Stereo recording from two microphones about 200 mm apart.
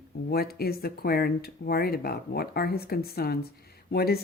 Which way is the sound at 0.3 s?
50° left (ahead or behind).